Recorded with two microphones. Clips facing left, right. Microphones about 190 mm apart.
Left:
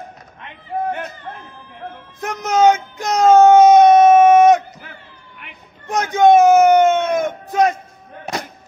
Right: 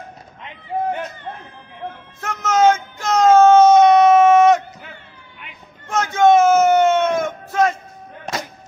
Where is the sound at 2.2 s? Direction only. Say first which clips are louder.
Left 1 dB; 15° left (ahead or behind).